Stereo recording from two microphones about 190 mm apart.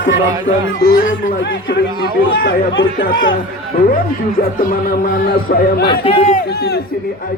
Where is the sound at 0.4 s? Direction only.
50° left (ahead or behind).